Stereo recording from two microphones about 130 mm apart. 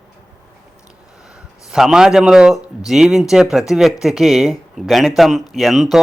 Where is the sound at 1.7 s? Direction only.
5° right (ahead or behind).